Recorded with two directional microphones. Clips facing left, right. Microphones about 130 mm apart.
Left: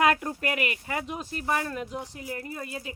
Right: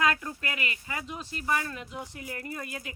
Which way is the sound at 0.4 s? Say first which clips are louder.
Left 7 dB; 55° left (ahead or behind).